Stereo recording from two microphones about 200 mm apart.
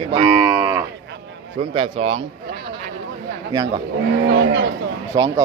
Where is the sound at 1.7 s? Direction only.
30° right (ahead or behind).